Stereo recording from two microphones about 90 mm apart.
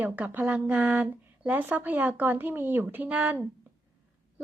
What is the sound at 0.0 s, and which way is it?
A woman's voice, 20° right (ahead or behind).